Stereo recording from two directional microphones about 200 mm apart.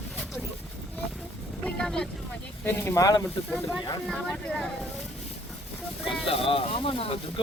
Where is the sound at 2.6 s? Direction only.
10° left (ahead or behind).